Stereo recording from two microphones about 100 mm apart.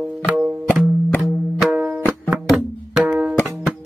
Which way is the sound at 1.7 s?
15° right (ahead or behind).